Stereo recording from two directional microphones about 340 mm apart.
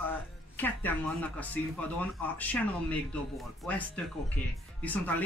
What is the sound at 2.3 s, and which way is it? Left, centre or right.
Speech, centre.